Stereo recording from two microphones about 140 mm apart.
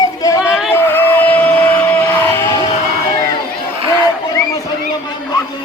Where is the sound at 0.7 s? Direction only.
15° left (ahead or behind).